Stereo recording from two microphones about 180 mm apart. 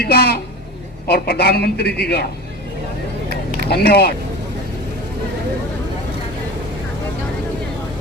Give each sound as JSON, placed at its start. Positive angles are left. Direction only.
{"t": 0.0, "sound": "a man's voice", "side_deg": 60}
{"t": 3.2, "sound": "a sound", "side_deg": -55}
{"t": 3.7, "sound": "a man's voice", "side_deg": 60}